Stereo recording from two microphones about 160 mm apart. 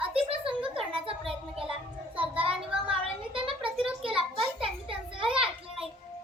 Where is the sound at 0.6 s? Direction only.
35° right (ahead or behind).